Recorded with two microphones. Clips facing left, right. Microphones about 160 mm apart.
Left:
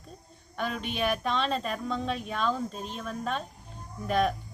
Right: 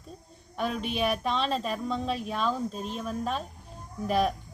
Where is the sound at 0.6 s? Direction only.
Centre (ahead or behind).